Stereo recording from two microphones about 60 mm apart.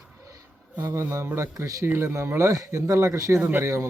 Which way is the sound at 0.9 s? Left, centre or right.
Right.